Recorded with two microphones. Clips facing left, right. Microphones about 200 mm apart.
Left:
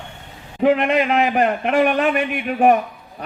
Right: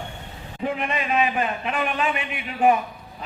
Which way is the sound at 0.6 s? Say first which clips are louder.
Left 10 dB; 80° left.